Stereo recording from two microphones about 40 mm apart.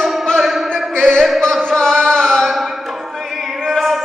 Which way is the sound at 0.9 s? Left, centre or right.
Centre.